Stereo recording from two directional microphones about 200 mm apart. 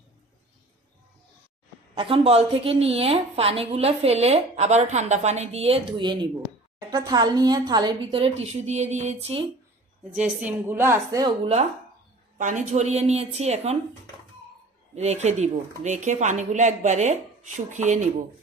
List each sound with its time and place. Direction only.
2.0 s a woman's voice: 25° right (ahead or behind)
10.2 s a woman's voice: 10° right (ahead or behind)
12.4 s a woman's voice: 35° right (ahead or behind)
14.9 s a woman's voice: 35° right (ahead or behind)